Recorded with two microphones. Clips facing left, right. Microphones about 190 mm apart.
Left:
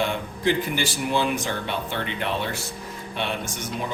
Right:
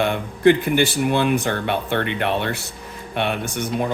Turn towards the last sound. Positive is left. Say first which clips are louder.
# right 6 dB
turn(degrees=-60)  # may be behind; listen again after turning